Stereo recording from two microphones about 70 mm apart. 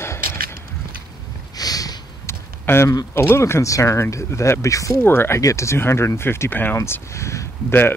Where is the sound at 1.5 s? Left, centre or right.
Left.